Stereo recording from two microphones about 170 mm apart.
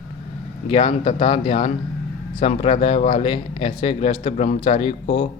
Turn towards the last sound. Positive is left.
turn(degrees=35)  # may be behind; listen again after turning